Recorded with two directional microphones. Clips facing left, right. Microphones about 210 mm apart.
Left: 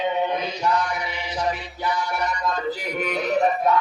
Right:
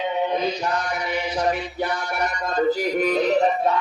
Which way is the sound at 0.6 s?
45° right (ahead or behind).